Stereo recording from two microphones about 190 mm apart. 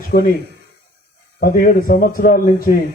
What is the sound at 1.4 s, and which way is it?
A man's voice, 50° left (ahead or behind).